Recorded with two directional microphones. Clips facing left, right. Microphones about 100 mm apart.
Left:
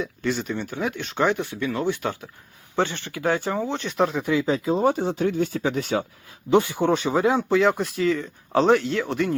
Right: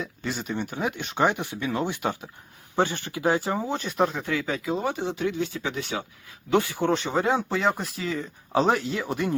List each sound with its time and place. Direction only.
0.0 s speech: centre (ahead or behind)
3.8 s speech: centre (ahead or behind)
4.2 s speech: 20° left (ahead or behind)
4.4 s speech: 30° left (ahead or behind)
6.5 s speech: 20° left (ahead or behind)
7.1 s speech: centre (ahead or behind)